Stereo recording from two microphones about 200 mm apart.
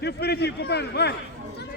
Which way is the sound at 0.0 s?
55° left (ahead or behind).